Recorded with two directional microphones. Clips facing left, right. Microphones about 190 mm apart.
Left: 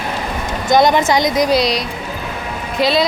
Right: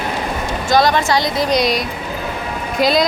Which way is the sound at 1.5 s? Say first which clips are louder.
Left 1 dB; centre (ahead or behind).